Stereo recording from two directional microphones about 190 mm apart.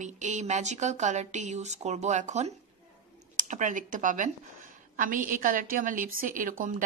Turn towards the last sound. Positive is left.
turn(degrees=-45)  # may be behind; listen again after turning